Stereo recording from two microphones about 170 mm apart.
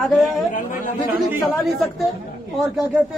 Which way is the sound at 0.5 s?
50° left (ahead or behind).